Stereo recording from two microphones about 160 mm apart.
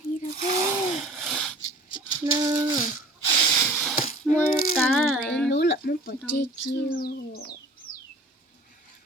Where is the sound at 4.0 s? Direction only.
55° left (ahead or behind).